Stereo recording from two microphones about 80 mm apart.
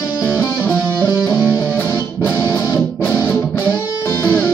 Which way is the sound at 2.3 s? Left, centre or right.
Left.